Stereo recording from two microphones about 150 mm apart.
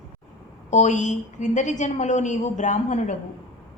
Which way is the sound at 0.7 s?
50° left (ahead or behind).